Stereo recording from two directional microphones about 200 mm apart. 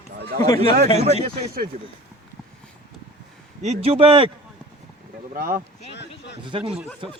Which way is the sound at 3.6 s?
30° right (ahead or behind).